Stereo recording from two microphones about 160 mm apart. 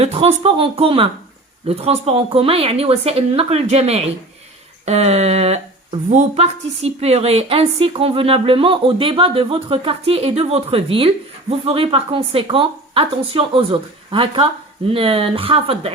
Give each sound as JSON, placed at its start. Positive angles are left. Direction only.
{"t": 0.0, "sound": "speech", "side_deg": -40}